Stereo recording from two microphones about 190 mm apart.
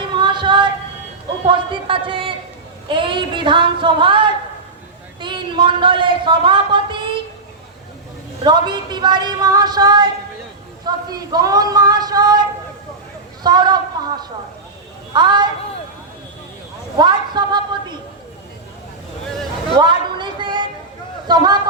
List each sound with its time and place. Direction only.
0.0 s a sound: 25° right (ahead or behind)
1.5 s a woman's voice: 25° right (ahead or behind)
8.4 s a woman's voice: 25° right (ahead or behind)
17.0 s a woman's voice: 25° right (ahead or behind)
19.7 s a woman's voice: 25° right (ahead or behind)